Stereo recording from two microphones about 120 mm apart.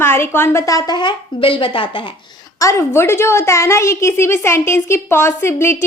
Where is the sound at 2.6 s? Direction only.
25° left (ahead or behind).